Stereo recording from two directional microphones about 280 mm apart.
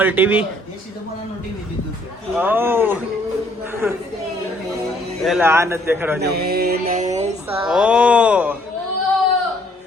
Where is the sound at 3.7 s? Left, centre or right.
Centre.